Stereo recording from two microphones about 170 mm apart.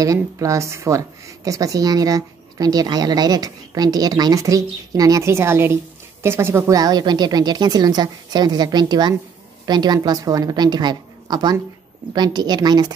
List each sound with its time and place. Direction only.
0.0 s speech: 20° right (ahead or behind)